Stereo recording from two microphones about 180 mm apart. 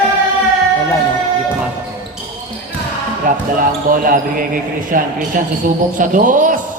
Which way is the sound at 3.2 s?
50° right (ahead or behind).